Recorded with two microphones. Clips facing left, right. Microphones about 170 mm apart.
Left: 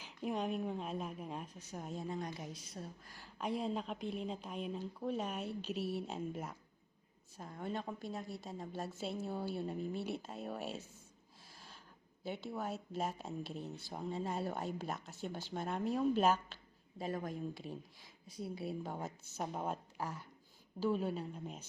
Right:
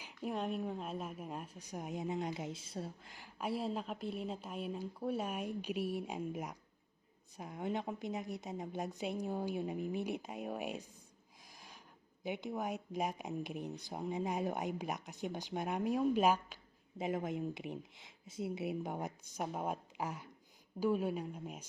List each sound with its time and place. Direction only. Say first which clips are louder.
0.0 s speech: left 1 dB; centre (ahead or behind); by 3.2 s 20° right (ahead or behind)
3.3 s speech: even; 5° right (ahead or behind)
11.5 s a sound: right 1 dB; 15° right (ahead or behind)
12.2 s speech: right 2 dB; 15° right (ahead or behind)